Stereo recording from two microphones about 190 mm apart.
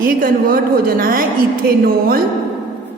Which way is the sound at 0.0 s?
50° right (ahead or behind).